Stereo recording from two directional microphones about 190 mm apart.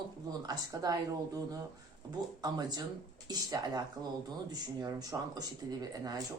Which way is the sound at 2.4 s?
20° right (ahead or behind).